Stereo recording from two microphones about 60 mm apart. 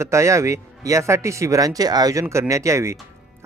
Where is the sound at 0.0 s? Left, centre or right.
Right.